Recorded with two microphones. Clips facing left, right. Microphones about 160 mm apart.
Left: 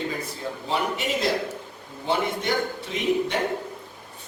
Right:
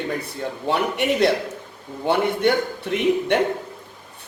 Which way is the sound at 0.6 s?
65° right (ahead or behind).